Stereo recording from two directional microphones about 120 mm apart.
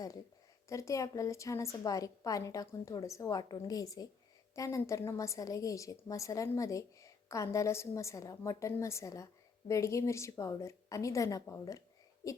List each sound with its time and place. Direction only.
0.7 s a woman's voice: 25° left (ahead or behind)